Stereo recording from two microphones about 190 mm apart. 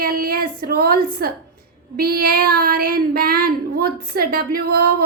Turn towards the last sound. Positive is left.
turn(degrees=-50)  # may be behind; listen again after turning